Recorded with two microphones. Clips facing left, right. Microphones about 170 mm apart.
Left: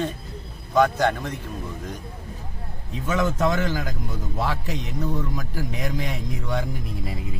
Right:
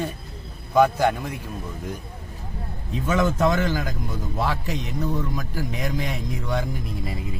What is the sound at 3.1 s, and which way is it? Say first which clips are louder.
Speech: right 2 dB; 35° right (ahead or behind).